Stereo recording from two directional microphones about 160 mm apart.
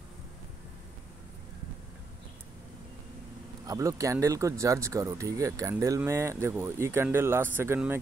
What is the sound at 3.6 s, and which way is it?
Speech, 20° right (ahead or behind).